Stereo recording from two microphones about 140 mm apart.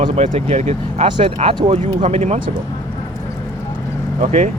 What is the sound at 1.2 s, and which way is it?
Speech, 40° right (ahead or behind).